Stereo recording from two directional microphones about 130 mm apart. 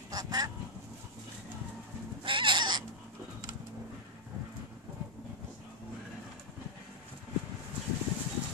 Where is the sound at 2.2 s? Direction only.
40° right (ahead or behind).